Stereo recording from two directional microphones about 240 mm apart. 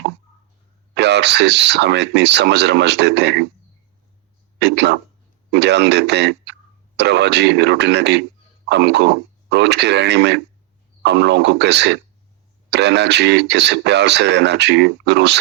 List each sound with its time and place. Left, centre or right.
0.9 s speech: right
4.6 s speech: right